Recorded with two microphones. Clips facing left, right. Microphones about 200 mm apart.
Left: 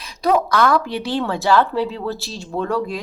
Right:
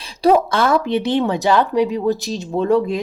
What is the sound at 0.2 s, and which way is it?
A woman's voice, 30° right (ahead or behind).